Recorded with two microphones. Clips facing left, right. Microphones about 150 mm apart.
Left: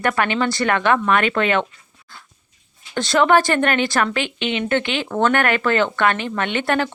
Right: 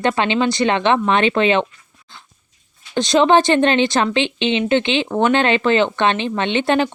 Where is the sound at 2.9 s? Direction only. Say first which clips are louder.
Right 2 dB; 20° right (ahead or behind).